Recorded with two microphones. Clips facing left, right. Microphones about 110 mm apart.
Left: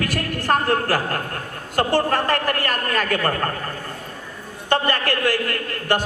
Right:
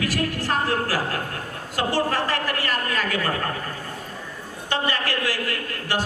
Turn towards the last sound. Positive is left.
turn(degrees=55)  # may be behind; listen again after turning